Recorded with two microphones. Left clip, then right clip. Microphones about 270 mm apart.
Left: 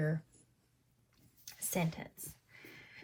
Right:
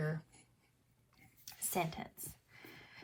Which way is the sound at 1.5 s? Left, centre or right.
Centre.